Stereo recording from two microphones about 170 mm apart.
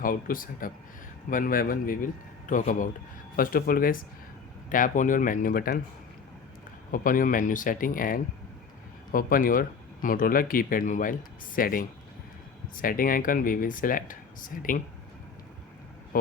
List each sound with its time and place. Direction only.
0.0 s speech: 55° left (ahead or behind)
6.9 s speech: 55° left (ahead or behind)